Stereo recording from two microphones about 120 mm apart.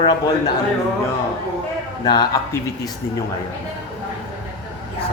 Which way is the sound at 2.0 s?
35° left (ahead or behind).